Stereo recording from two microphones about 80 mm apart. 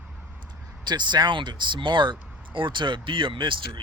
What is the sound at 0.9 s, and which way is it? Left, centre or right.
Speech, right.